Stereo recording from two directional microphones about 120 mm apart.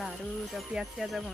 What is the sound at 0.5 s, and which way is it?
Speech, centre (ahead or behind).